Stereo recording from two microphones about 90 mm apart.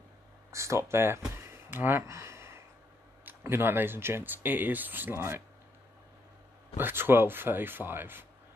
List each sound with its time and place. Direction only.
0.5 s a sound: 35° right (ahead or behind)
3.3 s speech: 25° right (ahead or behind)
6.8 s speech: 25° right (ahead or behind)